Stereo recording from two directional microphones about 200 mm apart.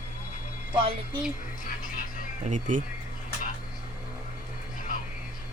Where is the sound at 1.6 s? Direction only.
45° left (ahead or behind).